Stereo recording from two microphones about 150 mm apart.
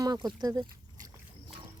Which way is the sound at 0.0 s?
25° right (ahead or behind).